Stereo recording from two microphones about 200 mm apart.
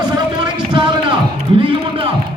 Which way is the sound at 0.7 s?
25° right (ahead or behind).